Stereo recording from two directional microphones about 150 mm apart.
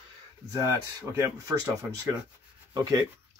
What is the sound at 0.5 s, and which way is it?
Speech, 20° right (ahead or behind).